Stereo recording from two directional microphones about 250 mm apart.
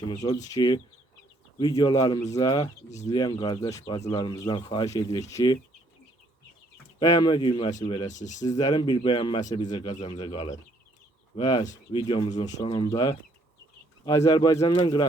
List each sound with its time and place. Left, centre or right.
0.1 s speech: centre
7.0 s speech: centre; by 8.4 s left
8.5 s speech: centre
11.6 s speech: left
14.3 s speech: centre